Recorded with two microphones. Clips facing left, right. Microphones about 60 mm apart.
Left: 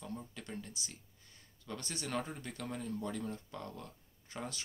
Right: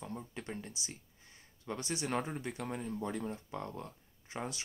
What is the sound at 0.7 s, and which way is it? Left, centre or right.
Speech, right.